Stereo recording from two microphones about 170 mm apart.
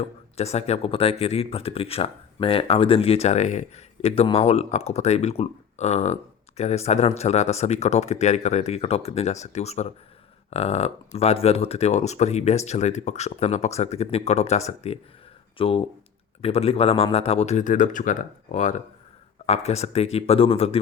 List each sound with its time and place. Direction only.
0.3 s speech: 40° left (ahead or behind)